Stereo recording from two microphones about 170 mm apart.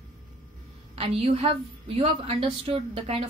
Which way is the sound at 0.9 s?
35° right (ahead or behind).